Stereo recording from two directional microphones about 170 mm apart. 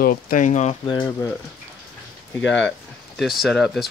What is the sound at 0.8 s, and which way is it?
Speech, 25° left (ahead or behind).